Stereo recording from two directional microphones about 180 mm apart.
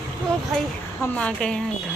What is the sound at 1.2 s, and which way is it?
Speech, 5° left (ahead or behind).